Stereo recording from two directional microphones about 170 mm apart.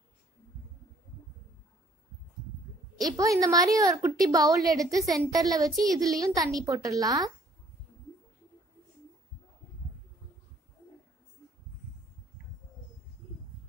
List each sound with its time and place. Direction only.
3.0 s a woman's voice: 20° right (ahead or behind)